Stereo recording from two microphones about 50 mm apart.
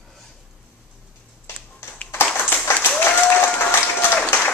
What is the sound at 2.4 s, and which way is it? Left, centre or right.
Applause, left.